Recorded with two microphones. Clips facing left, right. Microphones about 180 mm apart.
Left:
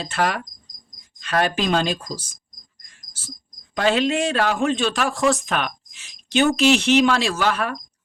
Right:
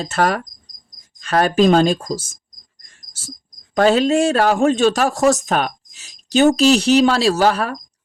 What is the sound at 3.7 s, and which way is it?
Speech, 40° right (ahead or behind).